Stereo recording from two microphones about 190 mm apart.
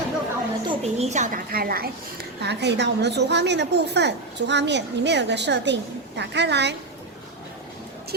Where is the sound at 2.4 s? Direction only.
60° right (ahead or behind).